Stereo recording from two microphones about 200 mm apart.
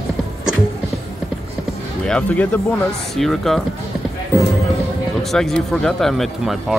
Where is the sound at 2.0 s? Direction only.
5° left (ahead or behind).